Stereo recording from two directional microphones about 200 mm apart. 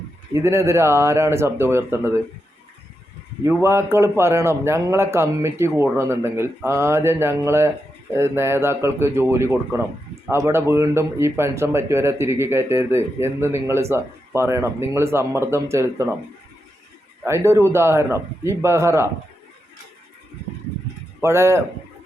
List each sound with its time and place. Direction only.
0.3 s speech: 15° right (ahead or behind)
3.6 s speech: 15° right (ahead or behind)
17.2 s speech: 15° right (ahead or behind)
21.2 s speech: 10° right (ahead or behind)